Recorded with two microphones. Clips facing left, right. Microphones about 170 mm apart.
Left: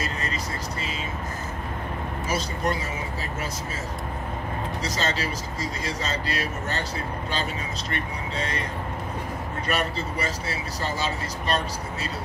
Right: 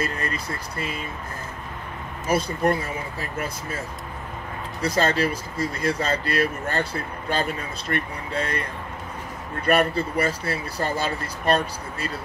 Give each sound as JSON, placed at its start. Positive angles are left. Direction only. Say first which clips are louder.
{"t": 0.0, "sound": "speech", "louder": "right 3 dB", "side_deg": -55}
{"t": 2.2, "sound": "speech", "louder": "right 6 dB", "side_deg": -55}
{"t": 4.8, "sound": "speech", "louder": "right 8 dB", "side_deg": -55}
{"t": 9.7, "sound": "speech", "louder": "right 8 dB", "side_deg": -55}